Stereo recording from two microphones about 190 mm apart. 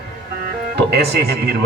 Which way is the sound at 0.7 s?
60° right (ahead or behind).